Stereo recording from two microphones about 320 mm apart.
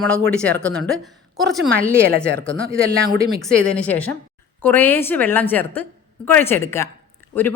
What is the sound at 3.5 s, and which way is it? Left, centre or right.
Speech, centre.